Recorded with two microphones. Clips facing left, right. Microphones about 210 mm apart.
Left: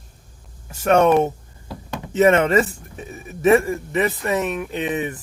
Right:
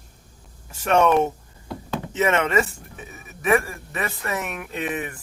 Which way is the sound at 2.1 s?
35° left (ahead or behind).